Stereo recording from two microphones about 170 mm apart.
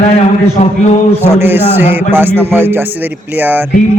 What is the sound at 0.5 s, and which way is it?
Speech, 45° left (ahead or behind).